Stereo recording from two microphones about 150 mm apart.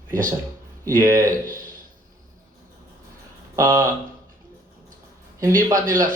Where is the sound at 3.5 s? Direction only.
20° right (ahead or behind).